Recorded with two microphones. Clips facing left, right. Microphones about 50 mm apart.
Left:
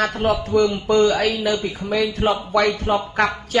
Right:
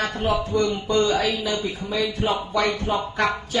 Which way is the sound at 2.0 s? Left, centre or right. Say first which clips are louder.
Left 4 dB; left.